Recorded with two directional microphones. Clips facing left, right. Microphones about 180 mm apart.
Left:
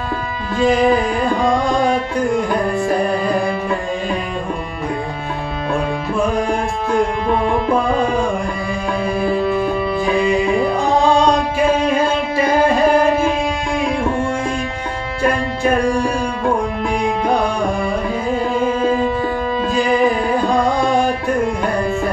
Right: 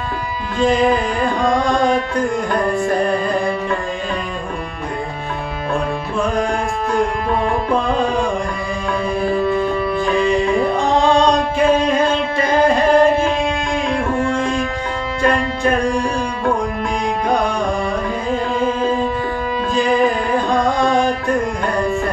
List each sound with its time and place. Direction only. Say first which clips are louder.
0.6 s carnatic music: left 1 dB; centre (ahead or behind)
1.5 s music: even; centre (ahead or behind)
7.9 s music: left 1 dB; centre (ahead or behind)
14.0 s music: even; 20° left (ahead or behind)
15.2 s music: even; centre (ahead or behind)
19.7 s music: even; centre (ahead or behind)